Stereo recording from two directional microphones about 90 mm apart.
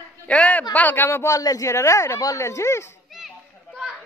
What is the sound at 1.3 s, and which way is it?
Speech, 40° left (ahead or behind).